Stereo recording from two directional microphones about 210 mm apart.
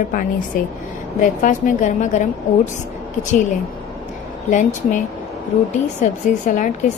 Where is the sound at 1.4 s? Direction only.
35° left (ahead or behind).